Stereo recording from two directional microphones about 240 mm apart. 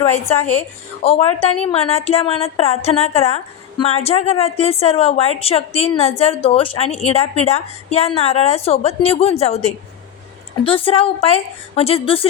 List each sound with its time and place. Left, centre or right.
1.0 s a woman's voice: left